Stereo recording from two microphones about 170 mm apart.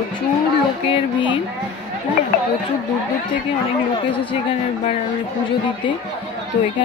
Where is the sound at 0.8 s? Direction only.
30° left (ahead or behind).